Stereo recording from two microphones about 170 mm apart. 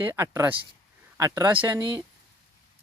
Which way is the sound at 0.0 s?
15° right (ahead or behind).